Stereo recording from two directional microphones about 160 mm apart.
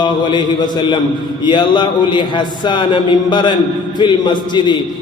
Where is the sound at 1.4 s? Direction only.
30° left (ahead or behind).